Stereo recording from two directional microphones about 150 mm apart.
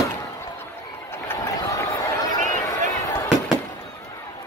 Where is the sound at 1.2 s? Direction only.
20° left (ahead or behind).